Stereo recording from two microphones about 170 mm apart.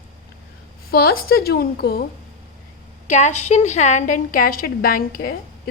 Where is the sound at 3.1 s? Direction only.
45° left (ahead or behind).